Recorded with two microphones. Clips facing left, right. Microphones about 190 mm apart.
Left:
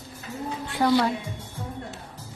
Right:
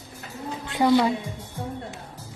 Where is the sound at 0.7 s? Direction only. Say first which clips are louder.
Right 2 dB; 20° right (ahead or behind).